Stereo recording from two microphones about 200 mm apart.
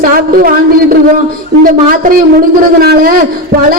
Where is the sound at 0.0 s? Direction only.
45° right (ahead or behind).